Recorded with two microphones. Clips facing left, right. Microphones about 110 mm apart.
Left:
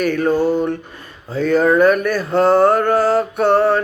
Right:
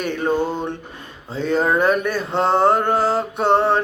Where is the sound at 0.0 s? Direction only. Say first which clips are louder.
Left 5 dB; 25° right (ahead or behind).